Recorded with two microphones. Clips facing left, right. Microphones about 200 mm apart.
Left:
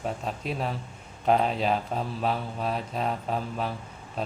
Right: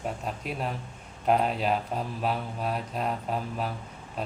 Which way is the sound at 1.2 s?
5° right (ahead or behind).